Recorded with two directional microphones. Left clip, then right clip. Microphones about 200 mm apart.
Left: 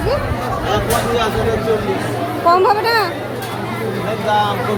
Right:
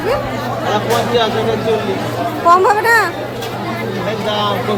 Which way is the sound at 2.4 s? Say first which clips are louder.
Right 3 dB; 20° right (ahead or behind).